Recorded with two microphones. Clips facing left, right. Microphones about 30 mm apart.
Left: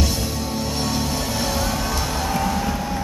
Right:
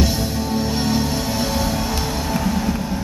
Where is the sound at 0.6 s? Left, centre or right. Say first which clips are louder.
Right 4 dB; centre.